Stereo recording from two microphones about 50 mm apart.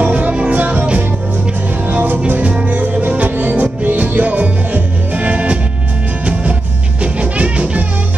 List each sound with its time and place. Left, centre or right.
0.0 s music: right
1.9 s music: right
7.0 s music: right